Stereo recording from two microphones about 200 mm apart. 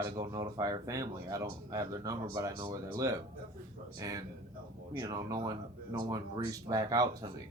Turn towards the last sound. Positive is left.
turn(degrees=-15)  # may be behind; listen again after turning